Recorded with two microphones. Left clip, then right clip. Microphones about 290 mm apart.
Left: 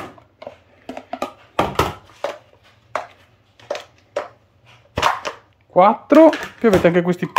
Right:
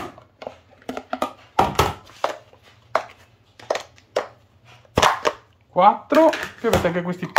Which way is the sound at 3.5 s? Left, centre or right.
Centre.